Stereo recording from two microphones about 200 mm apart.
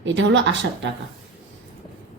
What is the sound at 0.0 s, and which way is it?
Speech, 65° right (ahead or behind).